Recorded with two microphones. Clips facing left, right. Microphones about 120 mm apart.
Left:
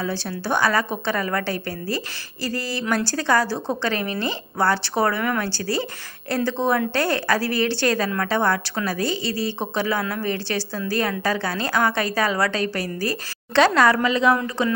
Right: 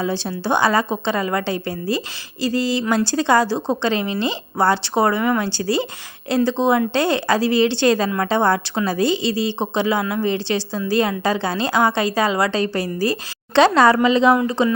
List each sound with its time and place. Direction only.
0.0 s speech: 25° right (ahead or behind)
2.4 s a sound: 15° right (ahead or behind)
3.1 s speech: 20° right (ahead or behind)